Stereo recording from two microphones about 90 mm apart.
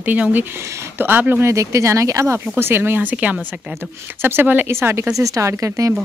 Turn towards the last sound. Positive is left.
turn(degrees=-35)  # may be behind; listen again after turning